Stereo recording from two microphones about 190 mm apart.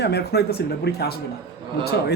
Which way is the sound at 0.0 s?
60° left (ahead or behind).